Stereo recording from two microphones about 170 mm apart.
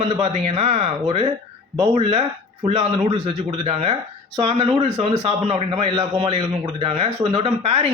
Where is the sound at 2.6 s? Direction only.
35° right (ahead or behind).